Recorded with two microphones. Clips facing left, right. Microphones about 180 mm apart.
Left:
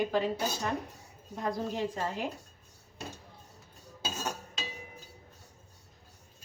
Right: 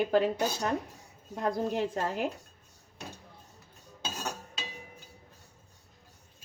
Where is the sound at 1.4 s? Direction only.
55° right (ahead or behind).